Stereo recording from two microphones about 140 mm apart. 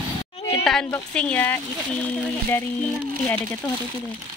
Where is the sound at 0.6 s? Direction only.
5° left (ahead or behind).